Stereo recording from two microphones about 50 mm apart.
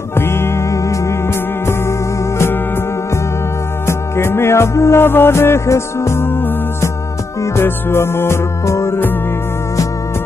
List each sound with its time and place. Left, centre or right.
0.1 s music: left
3.8 s music: left
5.0 s music: left
6.2 s music: left
7.6 s music: left
8.6 s music: left